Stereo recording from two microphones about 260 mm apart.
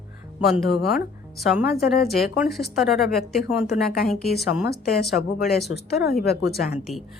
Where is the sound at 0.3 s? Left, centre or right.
Centre.